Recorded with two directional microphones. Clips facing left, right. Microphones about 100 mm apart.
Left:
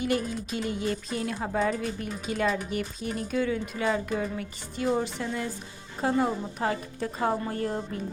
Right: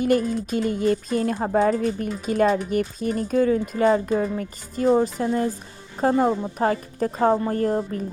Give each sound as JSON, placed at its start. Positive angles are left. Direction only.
{"t": 0.0, "sound": "speech", "side_deg": -45}